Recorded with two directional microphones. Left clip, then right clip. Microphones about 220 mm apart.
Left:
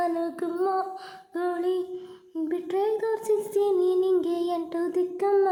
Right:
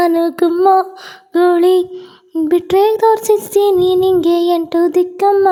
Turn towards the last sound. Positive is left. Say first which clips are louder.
# right 11 dB
turn(degrees=-40)  # may be behind; listen again after turning